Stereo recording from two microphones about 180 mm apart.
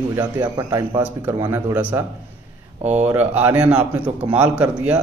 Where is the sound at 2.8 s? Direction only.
40° right (ahead or behind).